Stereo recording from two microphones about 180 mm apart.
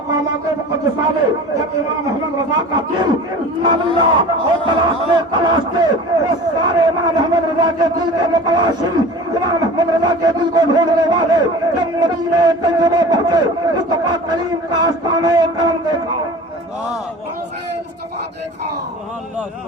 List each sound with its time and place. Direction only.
2.5 s a man's voice: 20° right (ahead or behind)